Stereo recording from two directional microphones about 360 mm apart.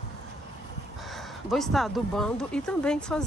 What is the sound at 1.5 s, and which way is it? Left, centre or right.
Speech, centre.